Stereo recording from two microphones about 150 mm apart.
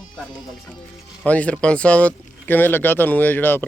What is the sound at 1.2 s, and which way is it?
Speech, 10° left (ahead or behind).